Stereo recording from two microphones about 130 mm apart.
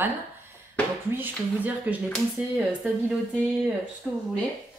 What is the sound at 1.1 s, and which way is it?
A woman's voice, 15° right (ahead or behind).